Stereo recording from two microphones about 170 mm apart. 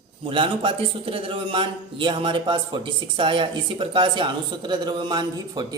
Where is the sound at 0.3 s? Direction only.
30° right (ahead or behind).